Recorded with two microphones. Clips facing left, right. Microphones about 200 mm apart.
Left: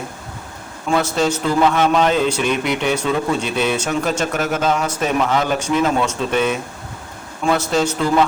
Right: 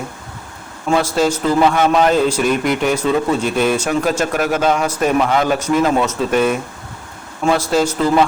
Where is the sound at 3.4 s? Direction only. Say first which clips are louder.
Right 4 dB; 45° right (ahead or behind).